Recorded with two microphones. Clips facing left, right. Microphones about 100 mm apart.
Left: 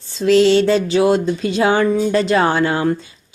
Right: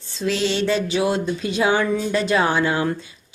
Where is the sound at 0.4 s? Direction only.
35° left (ahead or behind).